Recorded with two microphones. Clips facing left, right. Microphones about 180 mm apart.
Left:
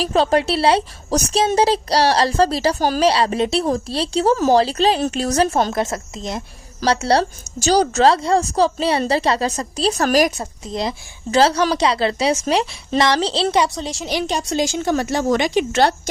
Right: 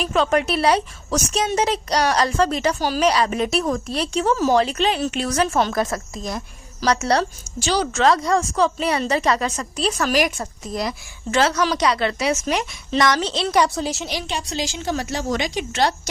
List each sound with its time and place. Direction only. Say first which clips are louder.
0.0 s speech: left 3 dB; 35° left (ahead or behind)
3.0 s speech: left 1 dB; 30° left (ahead or behind)
5.7 s speech: left 1 dB; 25° left (ahead or behind); by 10.3 s 40° left (ahead or behind)
10.3 s speech: left 1 dB; 25° left (ahead or behind)
13.7 s a woman's voice: right 2 dB; 5° right (ahead or behind)
14.3 s a woman's voice: left 6 dB; 45° left (ahead or behind); by 16.0 s 60° left (ahead or behind)